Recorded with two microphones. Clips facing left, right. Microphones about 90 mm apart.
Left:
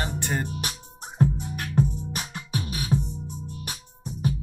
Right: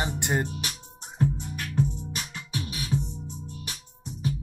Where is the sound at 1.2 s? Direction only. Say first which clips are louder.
Left 3 dB; 45° left (ahead or behind).